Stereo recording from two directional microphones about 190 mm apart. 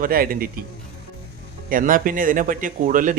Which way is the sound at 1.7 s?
45° right (ahead or behind).